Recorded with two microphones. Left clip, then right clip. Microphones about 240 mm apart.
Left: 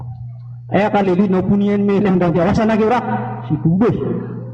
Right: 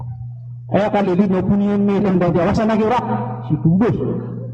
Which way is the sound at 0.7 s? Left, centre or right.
Right.